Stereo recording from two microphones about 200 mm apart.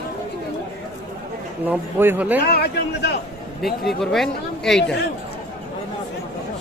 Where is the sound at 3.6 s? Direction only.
Centre (ahead or behind).